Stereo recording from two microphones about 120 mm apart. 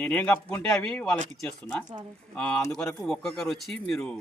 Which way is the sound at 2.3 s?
10° left (ahead or behind).